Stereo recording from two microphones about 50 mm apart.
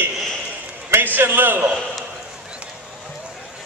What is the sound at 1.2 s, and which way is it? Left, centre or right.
Speech, right.